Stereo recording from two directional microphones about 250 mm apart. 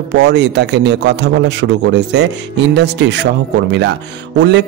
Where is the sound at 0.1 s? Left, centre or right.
Right.